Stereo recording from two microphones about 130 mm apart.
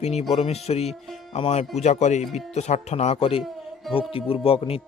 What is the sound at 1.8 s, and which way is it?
Speech, 65° left (ahead or behind).